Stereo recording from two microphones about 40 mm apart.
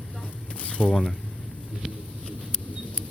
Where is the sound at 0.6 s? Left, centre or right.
Left.